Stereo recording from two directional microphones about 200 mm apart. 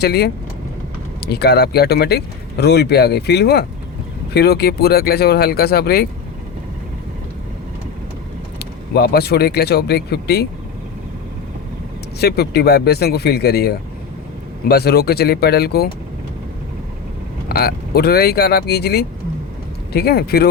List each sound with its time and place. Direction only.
0.0 s speech: 55° left (ahead or behind)
8.5 s speech: 55° left (ahead or behind)
12.2 s speech: 55° left (ahead or behind)
17.5 s speech: 50° left (ahead or behind)